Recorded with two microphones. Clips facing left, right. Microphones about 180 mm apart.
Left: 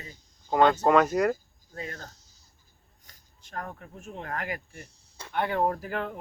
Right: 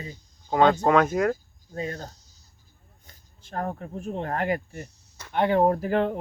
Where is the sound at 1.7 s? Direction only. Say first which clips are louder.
Right 7 dB; 25° right (ahead or behind).